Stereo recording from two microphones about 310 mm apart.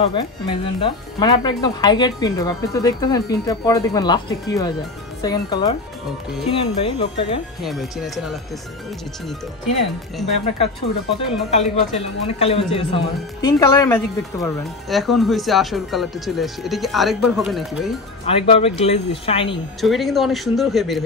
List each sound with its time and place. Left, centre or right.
0.0 s speech: centre
7.6 s speech: centre
10.2 s speech: centre
11.5 s speech: left; by 17.9 s centre
18.2 s speech: centre
19.8 s speech: centre